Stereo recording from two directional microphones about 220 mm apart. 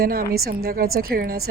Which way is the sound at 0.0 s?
45° right (ahead or behind).